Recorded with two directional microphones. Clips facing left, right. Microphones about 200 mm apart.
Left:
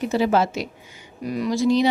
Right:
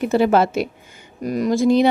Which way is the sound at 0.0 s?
55° right (ahead or behind).